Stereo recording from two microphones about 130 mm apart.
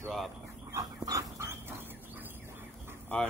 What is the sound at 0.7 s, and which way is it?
Dog, 25° right (ahead or behind).